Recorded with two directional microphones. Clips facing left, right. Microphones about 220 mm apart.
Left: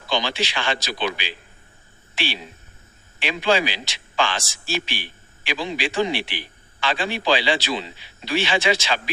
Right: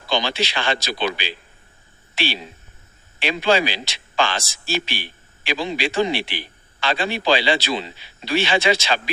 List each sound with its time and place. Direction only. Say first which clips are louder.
0.1 s a man's voice: right 2 dB; 35° right (ahead or behind)